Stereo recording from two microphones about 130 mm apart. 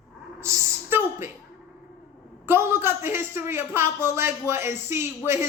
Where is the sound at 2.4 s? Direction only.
15° right (ahead or behind).